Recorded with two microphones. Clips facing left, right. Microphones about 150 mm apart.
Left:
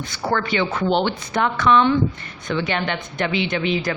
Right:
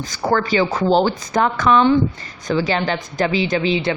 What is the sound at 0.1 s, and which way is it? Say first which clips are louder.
A woman's voice: right 4 dB; 40° right (ahead or behind).